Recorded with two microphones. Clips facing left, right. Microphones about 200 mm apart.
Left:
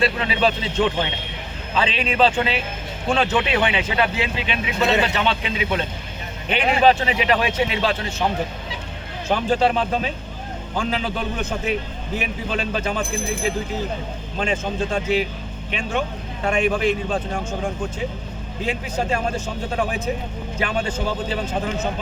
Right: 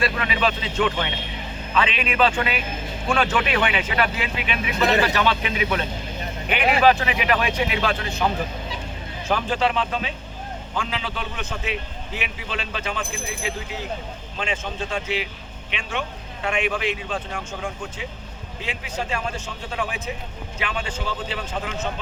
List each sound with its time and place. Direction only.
0.0 s a man's voice: 30° left (ahead or behind)
9.3 s a man's voice: 40° left (ahead or behind)
18.6 s a man's voice: 45° left (ahead or behind)